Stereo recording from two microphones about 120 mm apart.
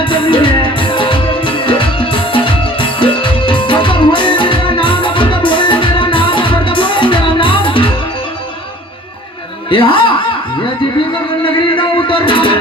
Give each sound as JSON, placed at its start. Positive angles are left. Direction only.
{"t": 0.0, "sound": "music", "side_deg": 45}
{"t": 9.6, "sound": "snicker", "side_deg": 45}
{"t": 11.4, "sound": "music", "side_deg": 45}